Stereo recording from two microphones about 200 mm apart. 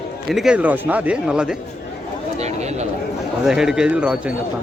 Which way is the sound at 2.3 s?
35° right (ahead or behind).